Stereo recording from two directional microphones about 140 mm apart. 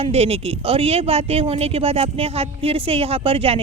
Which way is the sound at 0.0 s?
45° right (ahead or behind).